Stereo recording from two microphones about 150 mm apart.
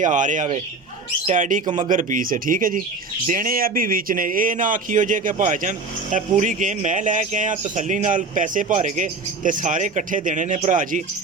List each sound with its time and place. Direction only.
0.0 s a man's voice: 60° right (ahead or behind)